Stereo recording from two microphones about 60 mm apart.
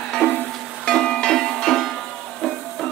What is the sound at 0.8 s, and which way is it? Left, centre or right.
Music, centre.